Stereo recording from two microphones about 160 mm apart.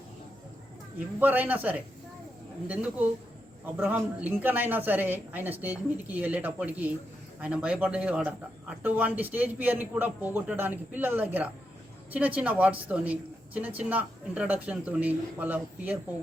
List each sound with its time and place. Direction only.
0.9 s speech: 10° right (ahead or behind)